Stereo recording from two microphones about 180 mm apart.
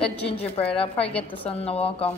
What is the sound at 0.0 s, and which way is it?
Speech, 5° left (ahead or behind).